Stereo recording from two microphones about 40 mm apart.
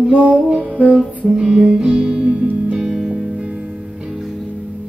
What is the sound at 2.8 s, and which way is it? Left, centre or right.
Music, centre.